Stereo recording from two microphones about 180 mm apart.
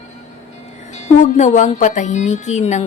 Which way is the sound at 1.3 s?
40° left (ahead or behind).